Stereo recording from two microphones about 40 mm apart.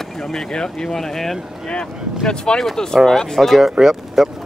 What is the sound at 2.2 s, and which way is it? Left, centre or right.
Speech, centre.